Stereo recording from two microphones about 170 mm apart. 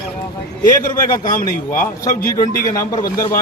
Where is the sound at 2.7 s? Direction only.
20° left (ahead or behind).